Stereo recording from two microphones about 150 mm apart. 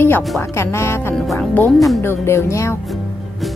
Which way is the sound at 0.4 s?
20° left (ahead or behind).